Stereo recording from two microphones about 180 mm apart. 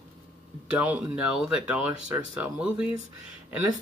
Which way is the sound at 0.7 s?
5° right (ahead or behind).